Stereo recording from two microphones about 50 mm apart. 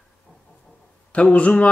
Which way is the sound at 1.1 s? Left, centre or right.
Left.